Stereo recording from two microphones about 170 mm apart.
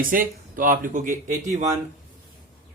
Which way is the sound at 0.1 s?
55° right (ahead or behind).